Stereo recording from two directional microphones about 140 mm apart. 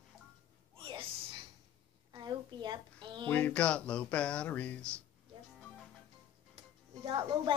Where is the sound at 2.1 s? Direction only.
30° right (ahead or behind).